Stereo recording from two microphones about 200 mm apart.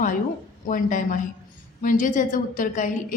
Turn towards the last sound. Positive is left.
turn(degrees=40)  # may be behind; listen again after turning